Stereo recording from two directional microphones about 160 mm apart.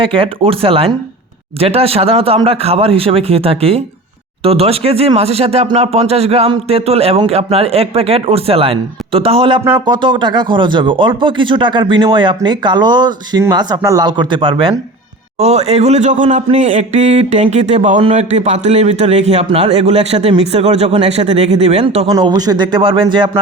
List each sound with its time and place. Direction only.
0.0 s a man's voice: 35° right (ahead or behind)
15.4 s a sound: 40° right (ahead or behind)
18.0 s a man's voice: 45° right (ahead or behind)
22.1 s a man's voice: 25° right (ahead or behind)